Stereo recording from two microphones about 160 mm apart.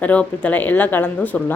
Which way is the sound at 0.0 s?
10° left (ahead or behind).